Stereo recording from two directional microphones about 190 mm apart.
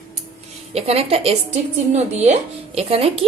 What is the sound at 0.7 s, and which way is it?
A woman's voice, 30° right (ahead or behind).